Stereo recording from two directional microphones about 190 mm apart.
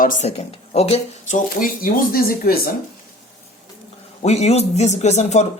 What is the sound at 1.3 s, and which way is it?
Speech, 45° left (ahead or behind).